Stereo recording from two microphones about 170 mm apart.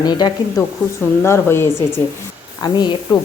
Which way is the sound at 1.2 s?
15° left (ahead or behind).